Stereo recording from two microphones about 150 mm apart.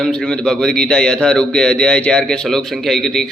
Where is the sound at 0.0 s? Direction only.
5° left (ahead or behind).